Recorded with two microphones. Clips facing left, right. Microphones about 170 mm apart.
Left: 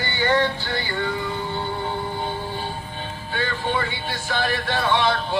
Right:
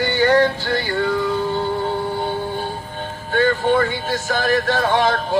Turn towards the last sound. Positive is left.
turn(degrees=-45)  # may be behind; listen again after turning